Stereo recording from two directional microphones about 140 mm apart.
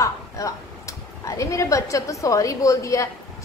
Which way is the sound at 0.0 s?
25° left (ahead or behind).